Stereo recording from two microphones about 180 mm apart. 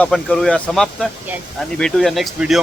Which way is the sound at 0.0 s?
5° left (ahead or behind).